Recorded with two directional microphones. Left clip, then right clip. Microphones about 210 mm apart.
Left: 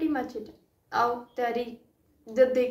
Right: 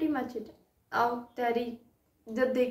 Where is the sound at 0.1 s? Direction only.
5° right (ahead or behind).